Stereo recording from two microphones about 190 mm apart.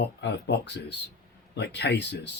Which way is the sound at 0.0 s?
65° left (ahead or behind).